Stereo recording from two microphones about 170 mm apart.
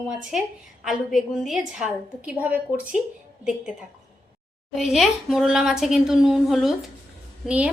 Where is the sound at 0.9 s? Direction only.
Centre (ahead or behind).